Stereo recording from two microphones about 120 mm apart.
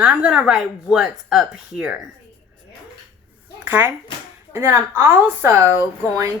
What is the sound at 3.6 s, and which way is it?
A child's voice, 15° right (ahead or behind).